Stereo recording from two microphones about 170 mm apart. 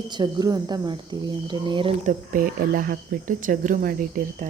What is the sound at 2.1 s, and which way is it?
Speech, 55° right (ahead or behind).